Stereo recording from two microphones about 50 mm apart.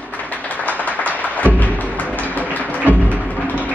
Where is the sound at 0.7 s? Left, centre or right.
Left.